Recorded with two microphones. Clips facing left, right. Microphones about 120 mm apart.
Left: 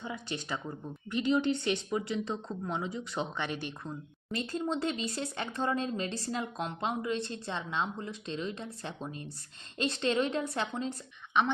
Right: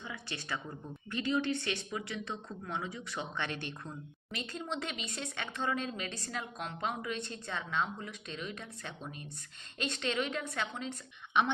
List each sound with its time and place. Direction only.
0.0 s a woman's voice: 25° left (ahead or behind)
3.3 s speech: 10° left (ahead or behind)
4.3 s a woman's voice: 35° left (ahead or behind)